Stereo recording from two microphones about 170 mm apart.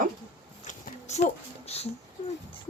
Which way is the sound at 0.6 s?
45° left (ahead or behind).